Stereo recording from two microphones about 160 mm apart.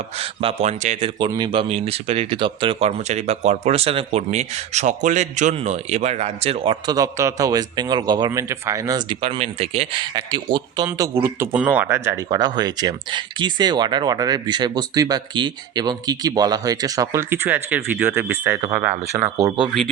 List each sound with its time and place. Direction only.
0.2 s speech: 40° right (ahead or behind)
1.2 s speech: 30° right (ahead or behind)
6.9 s speech: 20° right (ahead or behind)
9.2 s speech: 40° right (ahead or behind); by 19.5 s 10° right (ahead or behind)